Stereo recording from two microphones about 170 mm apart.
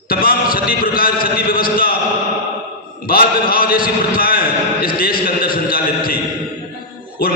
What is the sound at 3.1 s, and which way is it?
A man's voice, 60° left (ahead or behind).